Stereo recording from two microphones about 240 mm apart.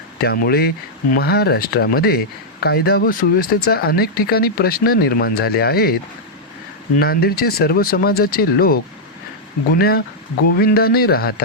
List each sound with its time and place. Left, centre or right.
0.3 s speech: left